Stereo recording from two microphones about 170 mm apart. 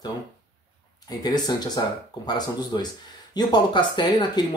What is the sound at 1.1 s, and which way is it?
Speech, 25° left (ahead or behind).